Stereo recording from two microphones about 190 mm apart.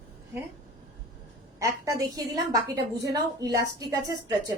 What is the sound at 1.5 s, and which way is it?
A woman's voice, 15° right (ahead or behind).